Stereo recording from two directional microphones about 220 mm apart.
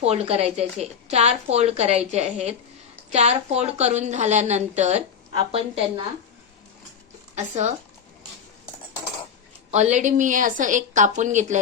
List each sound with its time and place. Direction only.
0.0 s a woman's voice: 30° right (ahead or behind)
7.3 s a woman's voice: 30° right (ahead or behind)
9.7 s a woman's voice: 30° right (ahead or behind)